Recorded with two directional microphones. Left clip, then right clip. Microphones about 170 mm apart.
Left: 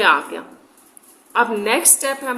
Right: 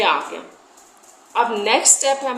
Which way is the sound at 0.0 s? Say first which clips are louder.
Left 3 dB; 45° left (ahead or behind).